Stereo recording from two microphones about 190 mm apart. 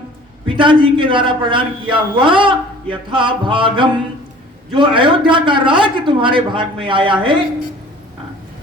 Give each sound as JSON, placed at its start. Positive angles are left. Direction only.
{"t": 0.4, "sound": "a man's voice", "side_deg": -25}